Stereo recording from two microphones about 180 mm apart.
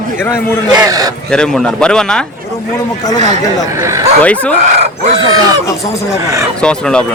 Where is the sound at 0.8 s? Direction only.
20° right (ahead or behind).